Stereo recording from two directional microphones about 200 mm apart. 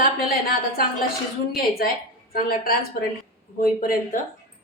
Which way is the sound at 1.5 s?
50° left (ahead or behind).